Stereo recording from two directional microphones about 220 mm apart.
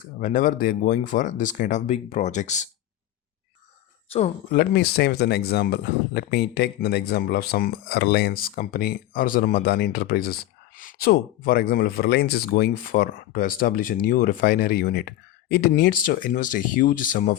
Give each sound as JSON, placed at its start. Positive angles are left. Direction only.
{"t": 0.2, "sound": "speech", "side_deg": 35}
{"t": 4.5, "sound": "speech", "side_deg": 45}